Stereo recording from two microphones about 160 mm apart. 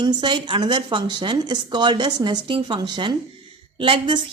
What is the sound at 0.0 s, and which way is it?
A woman's voice, 30° right (ahead or behind).